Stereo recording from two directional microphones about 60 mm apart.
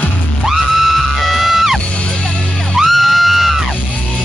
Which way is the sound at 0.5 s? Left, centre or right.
Centre.